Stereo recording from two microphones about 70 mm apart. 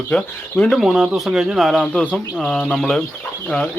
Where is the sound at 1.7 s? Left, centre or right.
Centre.